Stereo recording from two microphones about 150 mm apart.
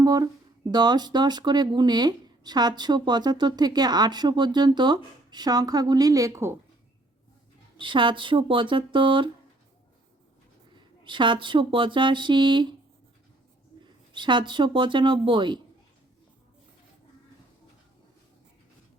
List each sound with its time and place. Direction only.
0.0 s speech: 25° right (ahead or behind)
7.8 s speech: 35° right (ahead or behind)
10.8 s speech: 30° right (ahead or behind)
14.1 s speech: 30° right (ahead or behind)